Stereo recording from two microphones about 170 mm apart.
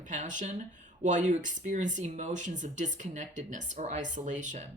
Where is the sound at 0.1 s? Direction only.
45° right (ahead or behind).